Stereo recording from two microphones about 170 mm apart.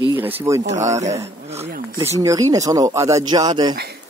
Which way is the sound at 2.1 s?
20° right (ahead or behind).